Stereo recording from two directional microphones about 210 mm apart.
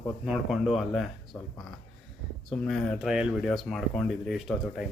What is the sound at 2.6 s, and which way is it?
Speech, centre (ahead or behind).